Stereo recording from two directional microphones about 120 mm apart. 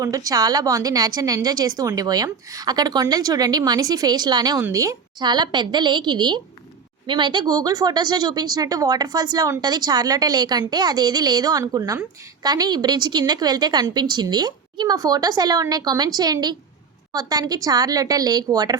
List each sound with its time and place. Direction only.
0.0 s speech: 30° right (ahead or behind)